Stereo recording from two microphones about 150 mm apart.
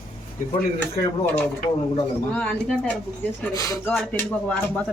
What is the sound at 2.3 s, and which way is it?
Speech, 10° left (ahead or behind).